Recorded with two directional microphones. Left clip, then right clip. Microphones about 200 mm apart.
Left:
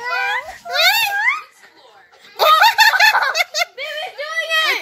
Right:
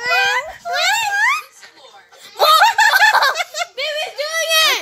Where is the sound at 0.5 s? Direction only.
5° left (ahead or behind).